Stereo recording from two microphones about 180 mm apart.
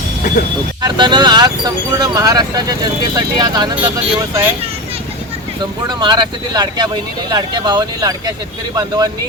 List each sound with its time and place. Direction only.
0.8 s speech: 25° right (ahead or behind)
5.9 s speech: 25° right (ahead or behind)